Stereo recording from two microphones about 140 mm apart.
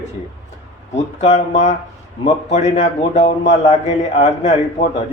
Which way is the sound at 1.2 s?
55° left (ahead or behind).